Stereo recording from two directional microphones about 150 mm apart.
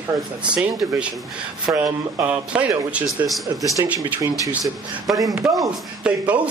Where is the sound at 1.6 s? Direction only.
20° right (ahead or behind).